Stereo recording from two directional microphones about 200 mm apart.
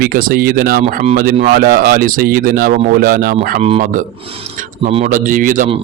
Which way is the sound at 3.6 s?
30° right (ahead or behind).